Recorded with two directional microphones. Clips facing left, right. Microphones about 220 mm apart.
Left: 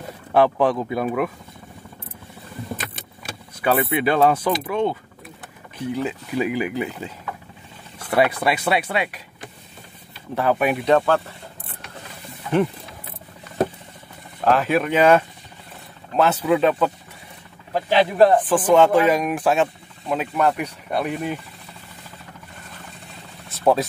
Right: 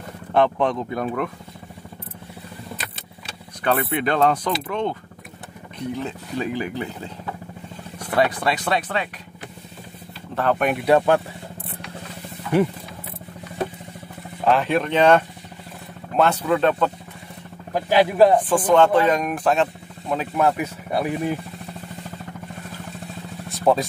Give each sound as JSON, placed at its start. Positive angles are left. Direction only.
{"t": 0.3, "sound": "speech", "side_deg": 5}
{"t": 3.6, "sound": "speech", "side_deg": 5}
{"t": 8.1, "sound": "speech", "side_deg": 10}
{"t": 10.3, "sound": "speech", "side_deg": 10}
{"t": 10.9, "sound": "speech", "side_deg": -15}
{"t": 14.4, "sound": "speech", "side_deg": 0}
{"t": 17.7, "sound": "speech", "side_deg": -10}
{"t": 23.5, "sound": "vehicle", "side_deg": 0}